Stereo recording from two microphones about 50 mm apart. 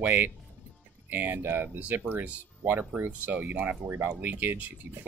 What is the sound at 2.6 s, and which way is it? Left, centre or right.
Speech, right.